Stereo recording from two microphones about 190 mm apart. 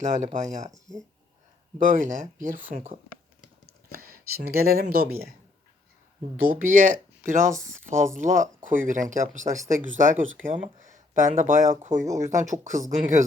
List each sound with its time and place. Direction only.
0.0 s speech: 40° right (ahead or behind)
0.7 s speech: centre (ahead or behind)
1.9 s speech: 40° right (ahead or behind)
3.7 s a sound: 55° right (ahead or behind)
6.4 s speech: 45° right (ahead or behind)
12.0 s speech: 15° right (ahead or behind)
12.4 s speech: 40° right (ahead or behind)